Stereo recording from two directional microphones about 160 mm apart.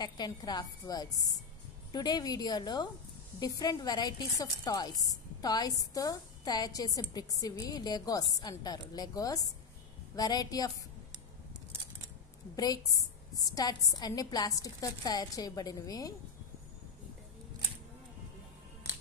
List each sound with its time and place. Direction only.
0.0 s a woman's voice: 25° left (ahead or behind)
12.5 s a woman's voice: 25° left (ahead or behind)